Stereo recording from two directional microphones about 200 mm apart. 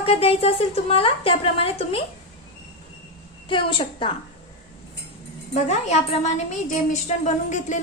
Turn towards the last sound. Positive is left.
turn(degrees=35)  # may be behind; listen again after turning